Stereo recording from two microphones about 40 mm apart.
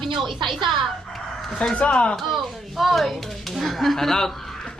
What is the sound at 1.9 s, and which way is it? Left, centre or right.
Speech, left.